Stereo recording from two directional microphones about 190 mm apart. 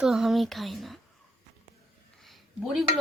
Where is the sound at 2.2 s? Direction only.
Centre (ahead or behind).